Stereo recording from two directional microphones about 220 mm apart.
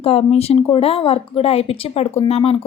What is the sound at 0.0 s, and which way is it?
A woman's voice, 25° left (ahead or behind).